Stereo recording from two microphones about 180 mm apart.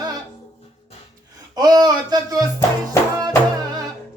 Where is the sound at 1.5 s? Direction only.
20° right (ahead or behind).